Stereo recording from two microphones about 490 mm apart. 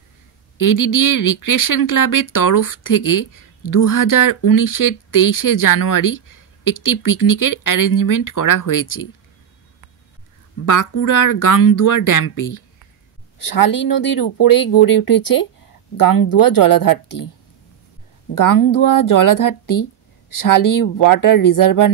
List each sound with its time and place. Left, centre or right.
0.6 s speech: left
10.6 s speech: left
18.3 s speech: left